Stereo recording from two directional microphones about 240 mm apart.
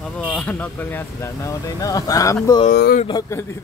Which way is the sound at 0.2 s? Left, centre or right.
Centre.